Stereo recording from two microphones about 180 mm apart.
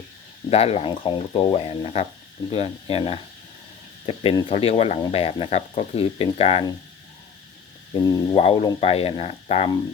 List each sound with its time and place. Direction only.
0.5 s speech: 35° left (ahead or behind)
7.9 s speech: 25° left (ahead or behind)